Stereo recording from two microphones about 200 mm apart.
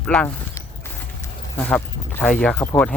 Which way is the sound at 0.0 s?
5° left (ahead or behind).